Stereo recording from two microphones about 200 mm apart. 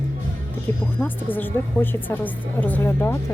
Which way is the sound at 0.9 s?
10° left (ahead or behind).